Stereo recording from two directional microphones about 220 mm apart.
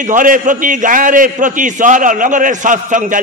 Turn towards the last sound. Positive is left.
turn(degrees=-35)  # may be behind; listen again after turning